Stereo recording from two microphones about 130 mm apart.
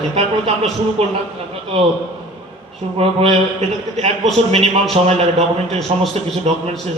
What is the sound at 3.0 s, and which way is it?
A man's voice, 55° right (ahead or behind).